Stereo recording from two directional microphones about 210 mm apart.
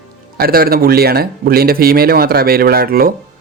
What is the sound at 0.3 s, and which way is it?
Speech, 45° right (ahead or behind).